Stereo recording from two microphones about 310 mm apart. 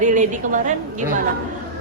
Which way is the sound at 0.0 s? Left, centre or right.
Right.